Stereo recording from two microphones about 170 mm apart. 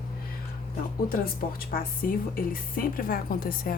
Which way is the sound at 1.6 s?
60° left (ahead or behind).